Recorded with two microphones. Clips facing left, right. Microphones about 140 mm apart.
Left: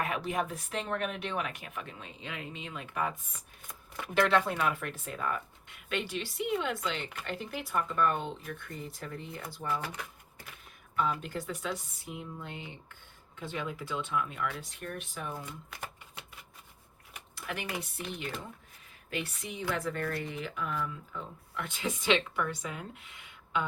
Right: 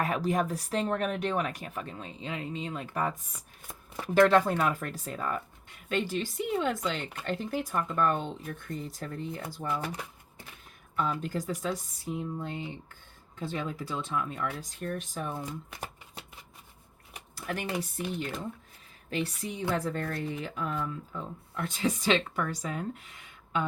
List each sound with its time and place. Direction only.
0.0 s a woman's voice: 35° right (ahead or behind)
9.9 s shuffling cards: 25° right (ahead or behind)
10.9 s a woman's voice: 40° right (ahead or behind)
17.3 s a sound: 40° right (ahead or behind)
17.7 s a woman's voice: 35° right (ahead or behind)